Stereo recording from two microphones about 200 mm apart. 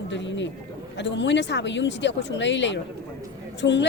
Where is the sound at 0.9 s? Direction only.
60° left (ahead or behind).